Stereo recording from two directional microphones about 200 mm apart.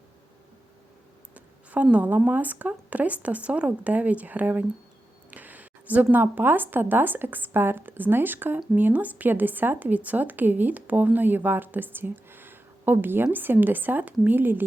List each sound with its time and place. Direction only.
1.3 s a woman's voice: 5° right (ahead or behind)